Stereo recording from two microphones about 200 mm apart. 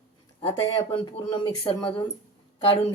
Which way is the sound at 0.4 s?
25° left (ahead or behind).